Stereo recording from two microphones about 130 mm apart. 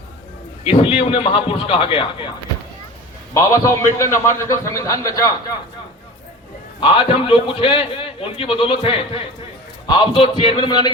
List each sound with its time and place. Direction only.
0.6 s a man's voice: 50° left (ahead or behind)
3.3 s a man's voice: 25° left (ahead or behind)
6.7 s a man's voice: 45° left (ahead or behind)